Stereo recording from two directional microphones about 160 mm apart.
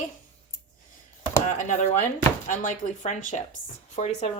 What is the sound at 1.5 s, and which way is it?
A woman's voice, 50° left (ahead or behind).